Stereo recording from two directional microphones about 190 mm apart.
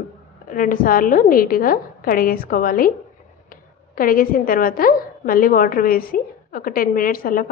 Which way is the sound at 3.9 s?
50° left (ahead or behind).